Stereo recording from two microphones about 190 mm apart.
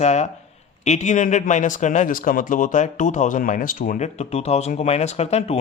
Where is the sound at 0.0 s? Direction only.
35° left (ahead or behind).